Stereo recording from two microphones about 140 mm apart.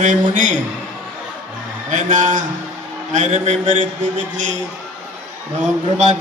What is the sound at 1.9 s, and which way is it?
Speech, 65° right (ahead or behind).